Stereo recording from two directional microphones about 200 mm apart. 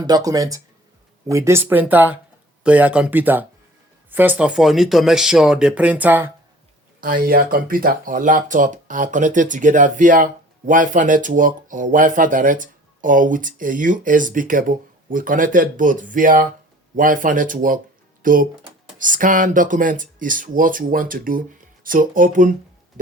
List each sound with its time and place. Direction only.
0.0 s speech: 20° right (ahead or behind)
7.0 s speech: 45° right (ahead or behind)
18.2 s music: 45° right (ahead or behind)
18.9 s speech: 40° right (ahead or behind)